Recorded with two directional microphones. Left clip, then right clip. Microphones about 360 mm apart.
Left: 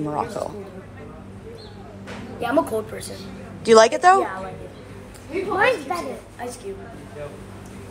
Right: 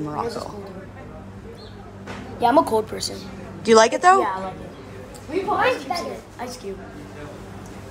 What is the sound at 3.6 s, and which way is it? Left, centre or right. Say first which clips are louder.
Speech: left 1 dB; centre.